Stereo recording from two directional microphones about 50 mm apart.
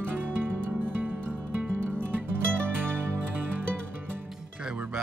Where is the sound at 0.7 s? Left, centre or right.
Right.